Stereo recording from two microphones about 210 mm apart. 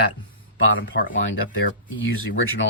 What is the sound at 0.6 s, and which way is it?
Speech, 65° left (ahead or behind).